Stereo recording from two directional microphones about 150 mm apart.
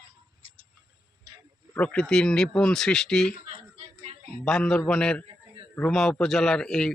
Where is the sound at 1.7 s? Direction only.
10° left (ahead or behind).